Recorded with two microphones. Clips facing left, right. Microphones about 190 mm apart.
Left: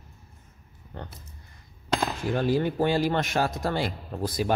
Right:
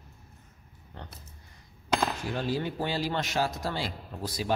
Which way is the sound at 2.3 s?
50° left (ahead or behind).